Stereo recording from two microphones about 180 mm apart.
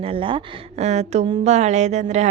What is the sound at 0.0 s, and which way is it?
Speech, 30° right (ahead or behind).